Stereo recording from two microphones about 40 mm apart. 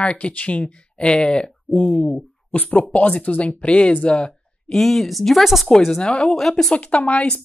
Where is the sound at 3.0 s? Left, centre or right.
Left.